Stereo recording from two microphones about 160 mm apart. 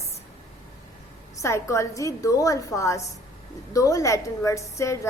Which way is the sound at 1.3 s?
20° left (ahead or behind).